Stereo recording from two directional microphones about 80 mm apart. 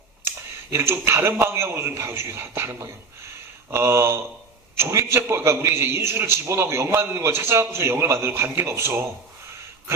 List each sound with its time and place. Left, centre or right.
0.3 s a man's voice: right